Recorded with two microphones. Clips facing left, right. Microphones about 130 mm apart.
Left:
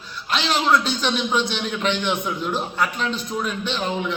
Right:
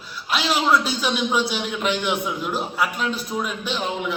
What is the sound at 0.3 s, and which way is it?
A man's voice, 5° right (ahead or behind).